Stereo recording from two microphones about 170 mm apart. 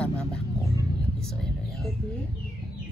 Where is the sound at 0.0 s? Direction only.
5° left (ahead or behind).